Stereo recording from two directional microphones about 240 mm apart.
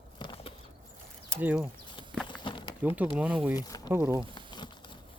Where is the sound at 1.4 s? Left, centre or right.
Centre.